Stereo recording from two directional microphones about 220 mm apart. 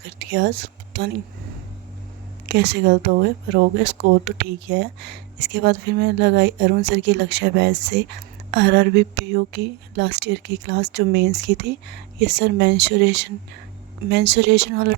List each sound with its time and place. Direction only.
0.0 s speech: 50° right (ahead or behind)
2.5 s speech: 50° right (ahead or behind)